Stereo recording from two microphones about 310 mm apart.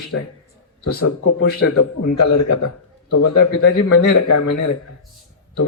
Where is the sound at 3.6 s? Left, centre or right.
Left.